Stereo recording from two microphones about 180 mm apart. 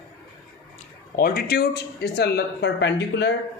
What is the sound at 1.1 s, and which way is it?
Speech, 55° left (ahead or behind).